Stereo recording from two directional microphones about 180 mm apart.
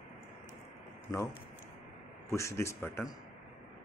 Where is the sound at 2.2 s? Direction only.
15° left (ahead or behind).